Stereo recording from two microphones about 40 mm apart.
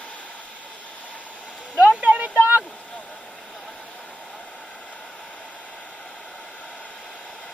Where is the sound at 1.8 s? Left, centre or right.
Right.